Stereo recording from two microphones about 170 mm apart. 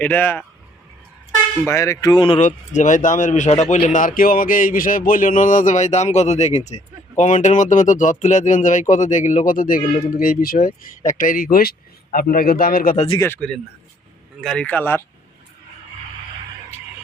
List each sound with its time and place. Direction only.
0.0 s speech: 10° left (ahead or behind)
1.6 s speech: 20° left (ahead or behind)
2.4 s speech: 45° left (ahead or behind)
13.1 s speech: 15° left (ahead or behind)